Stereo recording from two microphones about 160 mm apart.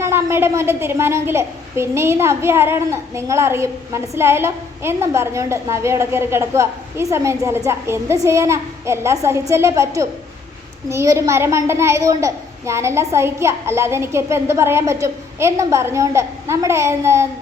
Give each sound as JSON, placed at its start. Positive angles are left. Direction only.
{"t": 0.0, "sound": "a woman's voice", "side_deg": -15}